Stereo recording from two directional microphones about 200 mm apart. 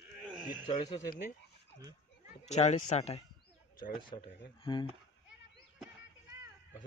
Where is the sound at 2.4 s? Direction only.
35° left (ahead or behind).